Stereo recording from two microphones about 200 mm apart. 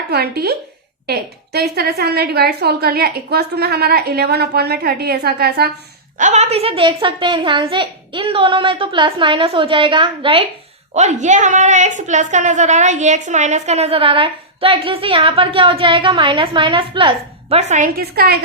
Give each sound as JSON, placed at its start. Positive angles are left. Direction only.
{"t": 0.1, "sound": "a woman's voice", "side_deg": -50}
{"t": 6.1, "sound": "a woman's voice", "side_deg": -35}
{"t": 10.9, "sound": "a woman's voice", "side_deg": -35}